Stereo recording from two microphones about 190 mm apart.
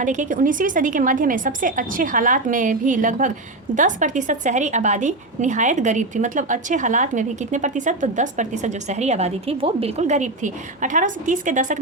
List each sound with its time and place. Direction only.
0.0 s a woman's voice: 40° right (ahead or behind)